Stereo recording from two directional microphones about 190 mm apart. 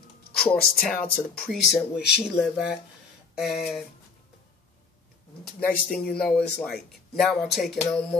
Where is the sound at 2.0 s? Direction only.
60° left (ahead or behind).